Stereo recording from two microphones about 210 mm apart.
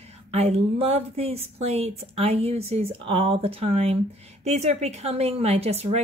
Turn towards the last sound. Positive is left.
turn(degrees=-30)  # may be behind; listen again after turning